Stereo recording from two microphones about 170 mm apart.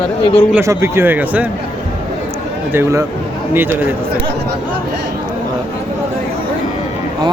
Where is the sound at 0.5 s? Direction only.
15° right (ahead or behind).